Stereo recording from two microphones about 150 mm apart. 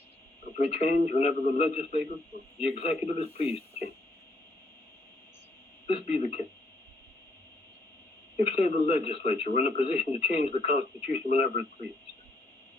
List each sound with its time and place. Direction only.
0.5 s speech: 45° left (ahead or behind)
5.9 s speech: 45° left (ahead or behind)
8.4 s speech: 45° left (ahead or behind)